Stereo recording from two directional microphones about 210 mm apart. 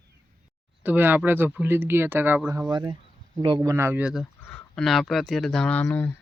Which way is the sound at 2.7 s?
20° right (ahead or behind).